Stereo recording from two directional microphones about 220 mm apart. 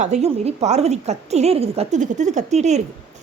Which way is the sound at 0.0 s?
30° right (ahead or behind).